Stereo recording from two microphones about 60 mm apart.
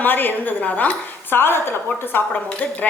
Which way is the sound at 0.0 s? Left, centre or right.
Left.